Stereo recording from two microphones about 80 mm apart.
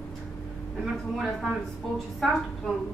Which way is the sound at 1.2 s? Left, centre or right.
Centre.